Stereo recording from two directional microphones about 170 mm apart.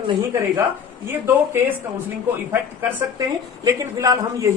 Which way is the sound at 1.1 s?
10° right (ahead or behind).